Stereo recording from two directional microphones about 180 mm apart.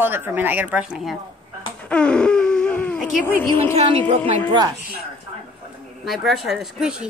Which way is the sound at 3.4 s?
15° left (ahead or behind).